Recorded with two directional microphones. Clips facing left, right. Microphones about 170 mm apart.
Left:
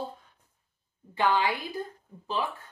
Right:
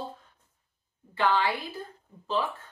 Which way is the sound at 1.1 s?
15° left (ahead or behind).